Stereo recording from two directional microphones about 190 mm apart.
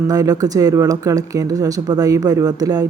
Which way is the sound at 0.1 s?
20° right (ahead or behind).